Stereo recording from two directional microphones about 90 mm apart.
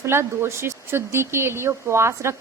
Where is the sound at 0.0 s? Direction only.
30° right (ahead or behind).